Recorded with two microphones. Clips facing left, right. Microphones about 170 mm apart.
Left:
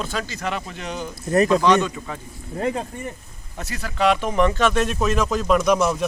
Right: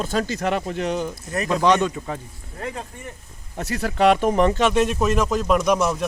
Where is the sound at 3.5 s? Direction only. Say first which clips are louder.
Right 4 dB; 60° right (ahead or behind).